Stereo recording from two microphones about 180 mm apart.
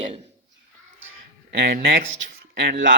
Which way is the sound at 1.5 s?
60° right (ahead or behind).